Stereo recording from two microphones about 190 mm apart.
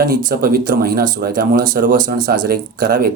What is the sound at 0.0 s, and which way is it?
A man's voice, 50° right (ahead or behind).